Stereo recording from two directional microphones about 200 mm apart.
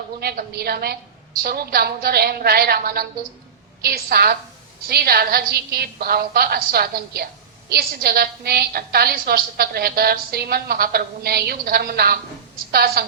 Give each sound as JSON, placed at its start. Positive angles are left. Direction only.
{"t": 0.2, "sound": "a woman's voice", "side_deg": -50}